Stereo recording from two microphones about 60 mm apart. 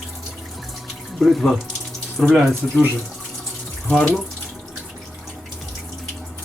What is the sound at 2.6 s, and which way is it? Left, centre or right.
Speech, centre.